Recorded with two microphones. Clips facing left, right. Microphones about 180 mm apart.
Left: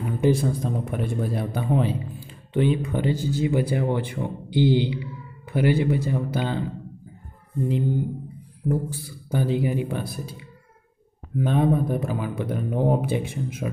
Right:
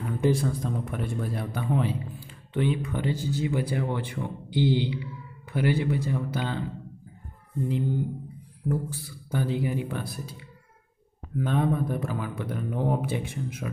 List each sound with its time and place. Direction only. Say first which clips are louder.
0.0 s a sound: left 3 dB; 10° left (ahead or behind)
0.5 s a man's voice: left 4 dB; 25° left (ahead or behind)
8.6 s a man's voice: left 4 dB; 25° left (ahead or behind)